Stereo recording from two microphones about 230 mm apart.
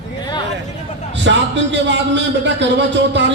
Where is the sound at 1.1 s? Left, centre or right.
Right.